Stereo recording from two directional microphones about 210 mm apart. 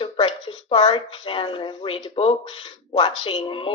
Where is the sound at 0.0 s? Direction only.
25° left (ahead or behind).